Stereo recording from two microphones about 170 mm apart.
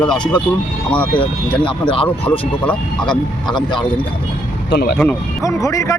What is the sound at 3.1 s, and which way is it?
Speech, 25° left (ahead or behind).